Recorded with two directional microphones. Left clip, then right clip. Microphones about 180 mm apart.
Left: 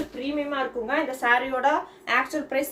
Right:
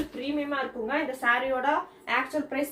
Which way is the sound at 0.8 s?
55° left (ahead or behind).